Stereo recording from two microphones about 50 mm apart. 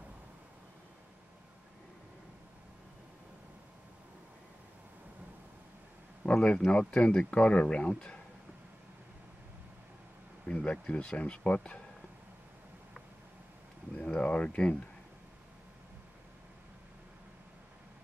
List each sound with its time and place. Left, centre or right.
6.2 s speech: left
10.4 s speech: left
14.0 s speech: left